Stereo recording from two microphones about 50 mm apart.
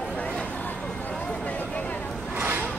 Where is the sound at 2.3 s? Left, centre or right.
Right.